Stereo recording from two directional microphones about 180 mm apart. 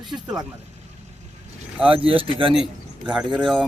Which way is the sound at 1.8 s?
30° right (ahead or behind).